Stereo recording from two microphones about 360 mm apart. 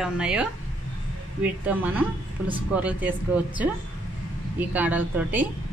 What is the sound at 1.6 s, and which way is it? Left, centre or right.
A woman's voice, centre.